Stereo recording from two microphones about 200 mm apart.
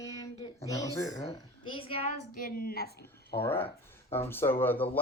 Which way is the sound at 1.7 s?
30° left (ahead or behind).